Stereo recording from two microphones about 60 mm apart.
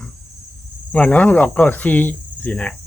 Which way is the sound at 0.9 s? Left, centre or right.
Left.